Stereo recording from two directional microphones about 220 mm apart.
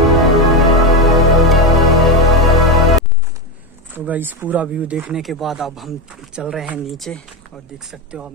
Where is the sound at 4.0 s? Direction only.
10° right (ahead or behind).